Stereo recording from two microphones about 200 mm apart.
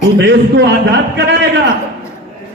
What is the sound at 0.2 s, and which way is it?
A man's voice, 65° right (ahead or behind).